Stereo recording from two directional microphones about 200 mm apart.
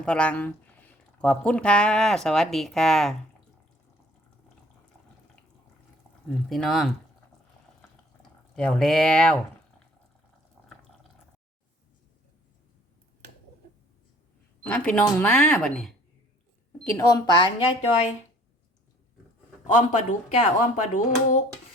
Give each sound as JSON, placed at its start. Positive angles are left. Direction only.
{"t": 0.0, "sound": "speech", "side_deg": 5}
{"t": 6.2, "sound": "speech", "side_deg": 0}
{"t": 8.5, "sound": "speech", "side_deg": 5}
{"t": 14.6, "sound": "speech", "side_deg": 10}
{"t": 16.9, "sound": "a woman's voice", "side_deg": 15}
{"t": 19.6, "sound": "speech", "side_deg": 40}